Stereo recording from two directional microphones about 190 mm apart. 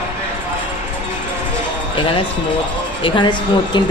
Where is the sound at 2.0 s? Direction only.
25° left (ahead or behind).